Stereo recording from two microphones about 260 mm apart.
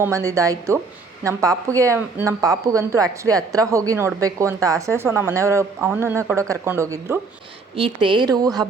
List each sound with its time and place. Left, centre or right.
0.0 s speech: centre